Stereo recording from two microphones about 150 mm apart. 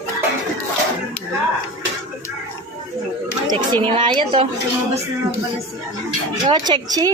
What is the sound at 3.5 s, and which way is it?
Speech, 35° right (ahead or behind).